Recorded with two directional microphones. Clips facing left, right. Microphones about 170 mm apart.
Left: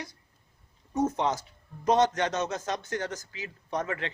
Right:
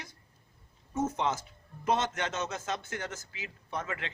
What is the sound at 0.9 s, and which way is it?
Speech, 15° left (ahead or behind).